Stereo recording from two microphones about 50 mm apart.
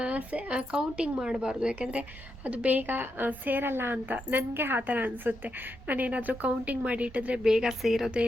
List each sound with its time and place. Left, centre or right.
0.0 s speech: right
2.5 s a woman's voice: right
3.9 s a woman's voice: right
7.4 s speech: centre